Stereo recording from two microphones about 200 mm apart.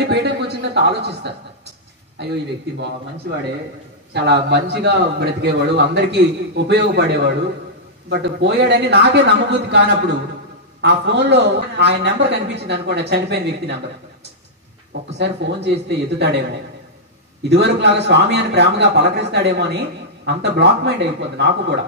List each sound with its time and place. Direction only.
0.1 s a sound: 55° right (ahead or behind)
4.1 s a man's voice: 55° right (ahead or behind)
15.1 s a man's voice: 60° right (ahead or behind)
17.4 s a man's voice: 60° right (ahead or behind)